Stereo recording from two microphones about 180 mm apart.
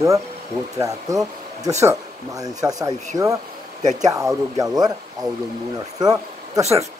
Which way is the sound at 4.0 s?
20° right (ahead or behind).